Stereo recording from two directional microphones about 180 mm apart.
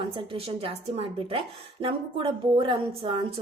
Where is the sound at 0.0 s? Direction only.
30° right (ahead or behind).